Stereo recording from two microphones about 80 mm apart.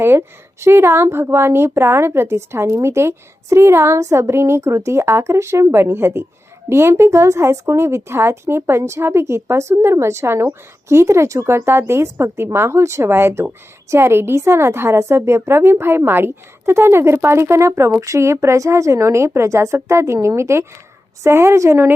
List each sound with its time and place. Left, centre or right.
0.0 s speech: right